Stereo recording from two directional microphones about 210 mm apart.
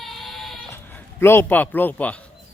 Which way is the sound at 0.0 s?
Centre (ahead or behind).